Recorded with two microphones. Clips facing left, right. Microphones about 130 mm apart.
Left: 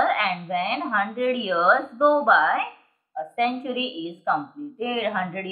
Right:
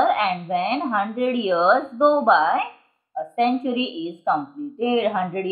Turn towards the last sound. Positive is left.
turn(degrees=-25)  # may be behind; listen again after turning